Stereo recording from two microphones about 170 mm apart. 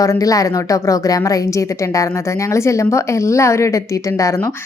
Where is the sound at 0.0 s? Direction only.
20° left (ahead or behind).